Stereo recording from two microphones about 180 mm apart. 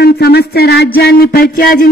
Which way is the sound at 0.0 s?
60° left (ahead or behind).